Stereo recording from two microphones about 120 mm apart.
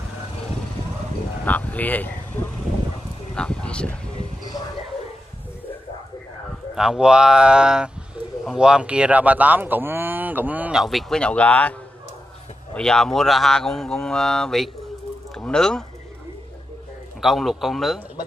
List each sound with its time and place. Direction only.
1.4 s speech: 10° left (ahead or behind)
3.3 s speech: 5° left (ahead or behind)
6.7 s speech: 5° right (ahead or behind)
10.8 s speech: centre (ahead or behind)
12.7 s speech: 5° left (ahead or behind)
17.2 s speech: centre (ahead or behind)